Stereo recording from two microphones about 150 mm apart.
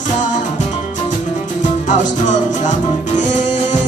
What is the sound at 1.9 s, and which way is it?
Music, 55° left (ahead or behind).